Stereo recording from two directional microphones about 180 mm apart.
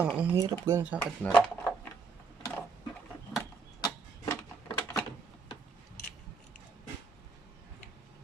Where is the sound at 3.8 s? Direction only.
15° left (ahead or behind).